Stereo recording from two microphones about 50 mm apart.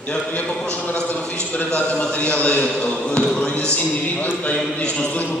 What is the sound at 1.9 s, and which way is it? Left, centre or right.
A man's voice, left.